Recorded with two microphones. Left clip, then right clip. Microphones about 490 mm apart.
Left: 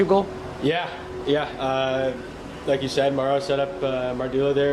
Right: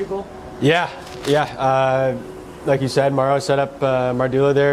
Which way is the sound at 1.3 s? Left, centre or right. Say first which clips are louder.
Right 6 dB; right.